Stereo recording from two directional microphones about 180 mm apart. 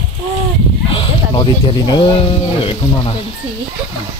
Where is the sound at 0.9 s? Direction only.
25° left (ahead or behind).